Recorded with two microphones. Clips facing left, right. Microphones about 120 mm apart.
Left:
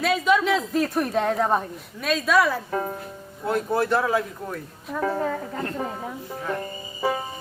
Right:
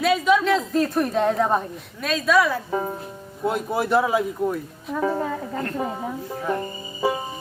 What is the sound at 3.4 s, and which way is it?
Speech, 15° right (ahead or behind).